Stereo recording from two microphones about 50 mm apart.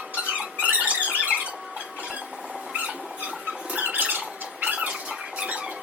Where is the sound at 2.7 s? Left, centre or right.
Right.